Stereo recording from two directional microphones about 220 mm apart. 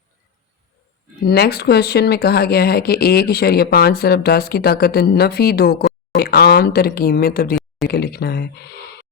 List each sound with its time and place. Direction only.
1.2 s speech: 45° left (ahead or behind)